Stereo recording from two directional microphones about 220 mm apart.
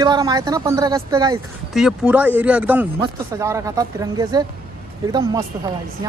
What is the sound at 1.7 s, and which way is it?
A man's voice, 5° right (ahead or behind).